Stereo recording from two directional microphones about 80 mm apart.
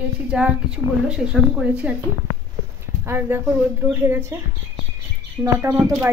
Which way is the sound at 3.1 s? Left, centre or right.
Right.